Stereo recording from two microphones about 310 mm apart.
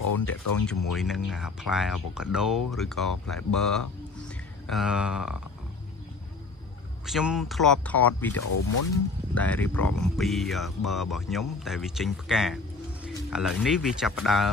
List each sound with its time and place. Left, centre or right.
0.0 s speech: left
0.9 s speech: centre
7.1 s speech: centre
8.5 s speech: left
8.9 s speech: centre